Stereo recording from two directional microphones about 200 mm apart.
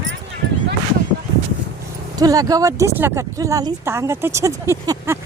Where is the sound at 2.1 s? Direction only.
20° right (ahead or behind).